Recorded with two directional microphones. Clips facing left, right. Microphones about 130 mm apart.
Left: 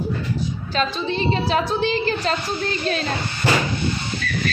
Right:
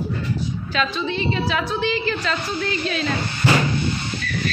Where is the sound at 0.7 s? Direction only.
35° left (ahead or behind).